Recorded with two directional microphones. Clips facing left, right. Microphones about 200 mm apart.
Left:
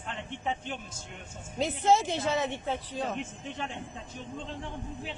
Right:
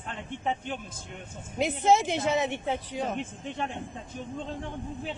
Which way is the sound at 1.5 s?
15° right (ahead or behind).